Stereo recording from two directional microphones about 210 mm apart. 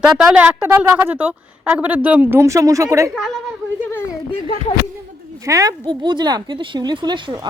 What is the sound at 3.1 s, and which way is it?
Speech, centre (ahead or behind).